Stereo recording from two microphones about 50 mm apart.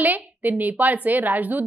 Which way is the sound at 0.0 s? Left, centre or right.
Right.